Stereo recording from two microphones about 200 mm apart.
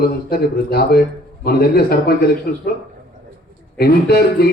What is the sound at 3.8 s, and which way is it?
Speech, 50° left (ahead or behind).